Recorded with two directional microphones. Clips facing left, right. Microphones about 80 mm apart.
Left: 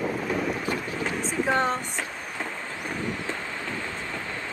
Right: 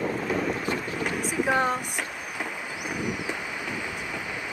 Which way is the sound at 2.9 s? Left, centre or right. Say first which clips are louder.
Right 1 dB; centre.